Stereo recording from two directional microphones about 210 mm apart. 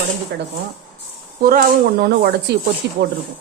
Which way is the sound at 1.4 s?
45° right (ahead or behind).